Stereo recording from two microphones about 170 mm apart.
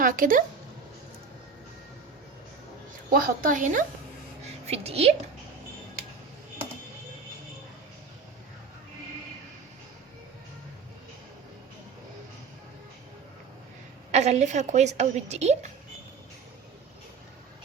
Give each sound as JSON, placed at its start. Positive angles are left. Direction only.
{"t": 0.0, "sound": "speech", "side_deg": -55}
{"t": 3.1, "sound": "a woman's voice", "side_deg": -60}
{"t": 14.1, "sound": "a woman's voice", "side_deg": -40}